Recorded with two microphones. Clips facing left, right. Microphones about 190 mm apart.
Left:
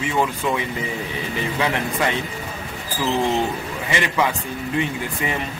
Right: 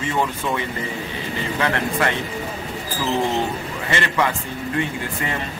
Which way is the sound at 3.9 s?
10° left (ahead or behind).